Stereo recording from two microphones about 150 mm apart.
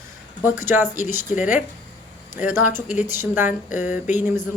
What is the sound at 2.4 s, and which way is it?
Speech, 15° right (ahead or behind).